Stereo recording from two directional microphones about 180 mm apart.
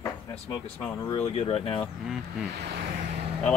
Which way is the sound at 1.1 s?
35° left (ahead or behind).